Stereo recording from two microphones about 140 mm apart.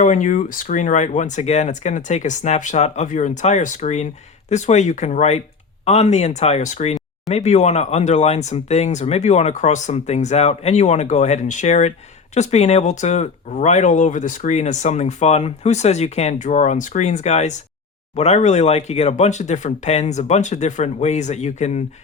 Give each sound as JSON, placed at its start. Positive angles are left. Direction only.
{"t": 0.0, "sound": "speech", "side_deg": 60}